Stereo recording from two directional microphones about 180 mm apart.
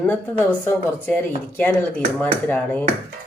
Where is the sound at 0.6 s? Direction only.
10° left (ahead or behind).